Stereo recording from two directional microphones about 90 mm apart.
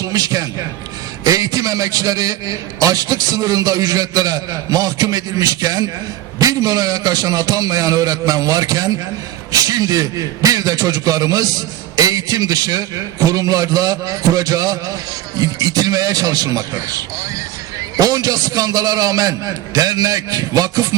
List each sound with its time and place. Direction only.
0.0 s a man's voice: 40° right (ahead or behind)